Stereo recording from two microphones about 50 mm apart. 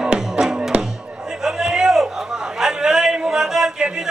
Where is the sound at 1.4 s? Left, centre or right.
Centre.